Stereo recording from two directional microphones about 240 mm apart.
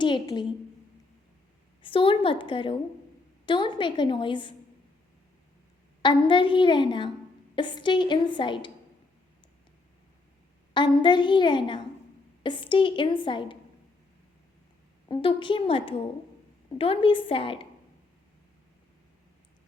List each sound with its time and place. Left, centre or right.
0.0 s a woman's voice: centre
1.8 s a woman's voice: left
6.0 s a woman's voice: centre
10.8 s a woman's voice: centre
15.1 s a woman's voice: left